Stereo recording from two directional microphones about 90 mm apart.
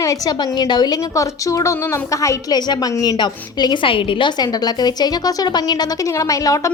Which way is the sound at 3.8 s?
80° left.